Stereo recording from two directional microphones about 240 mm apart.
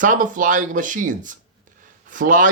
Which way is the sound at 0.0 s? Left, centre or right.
Right.